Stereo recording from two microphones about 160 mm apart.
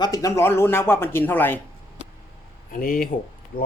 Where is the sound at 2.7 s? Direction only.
60° left (ahead or behind).